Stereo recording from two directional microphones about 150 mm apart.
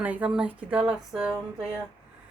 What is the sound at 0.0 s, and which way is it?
Speech, 10° right (ahead or behind).